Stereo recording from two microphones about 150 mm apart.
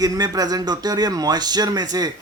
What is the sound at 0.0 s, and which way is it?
Speech, 25° right (ahead or behind).